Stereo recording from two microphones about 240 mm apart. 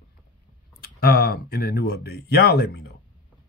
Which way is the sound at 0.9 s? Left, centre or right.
Left.